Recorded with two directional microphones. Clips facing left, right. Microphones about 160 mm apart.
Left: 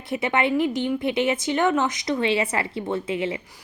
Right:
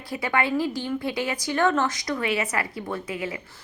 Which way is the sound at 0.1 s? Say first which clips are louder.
Left 3 dB; 20° left (ahead or behind).